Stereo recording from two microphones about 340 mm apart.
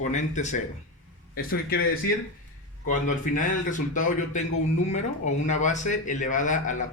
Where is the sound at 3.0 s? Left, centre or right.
Left.